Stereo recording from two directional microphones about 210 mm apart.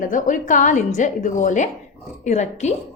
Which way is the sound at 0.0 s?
40° left (ahead or behind).